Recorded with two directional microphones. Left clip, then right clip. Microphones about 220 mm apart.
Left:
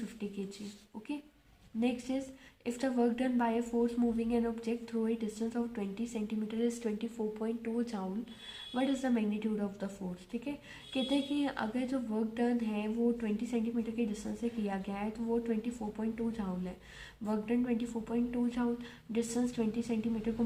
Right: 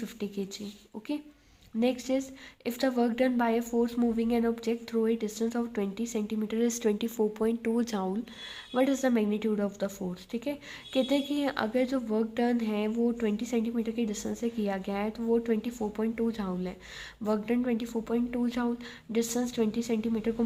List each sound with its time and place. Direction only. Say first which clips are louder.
0.2 s speech: right 6 dB; 40° right (ahead or behind)
1.8 s speech: right 7 dB; 40° right (ahead or behind)